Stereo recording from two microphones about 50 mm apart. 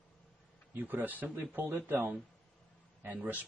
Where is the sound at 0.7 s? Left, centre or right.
Right.